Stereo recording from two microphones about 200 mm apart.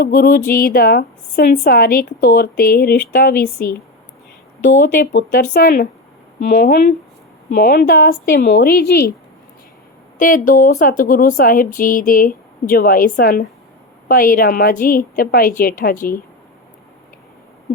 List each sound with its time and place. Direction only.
0.0 s a woman's voice: 45° left (ahead or behind)
10.2 s a woman's voice: 40° left (ahead or behind)